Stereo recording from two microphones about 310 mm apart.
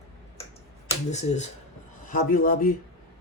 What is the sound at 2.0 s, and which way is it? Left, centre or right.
Speech, left.